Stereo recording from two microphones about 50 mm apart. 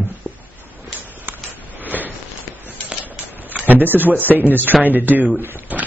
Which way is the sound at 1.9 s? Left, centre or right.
Right.